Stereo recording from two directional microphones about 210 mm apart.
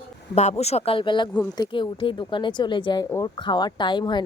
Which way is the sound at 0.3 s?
30° left (ahead or behind).